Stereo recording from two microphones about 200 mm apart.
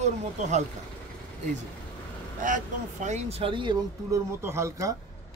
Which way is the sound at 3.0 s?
30° right (ahead or behind).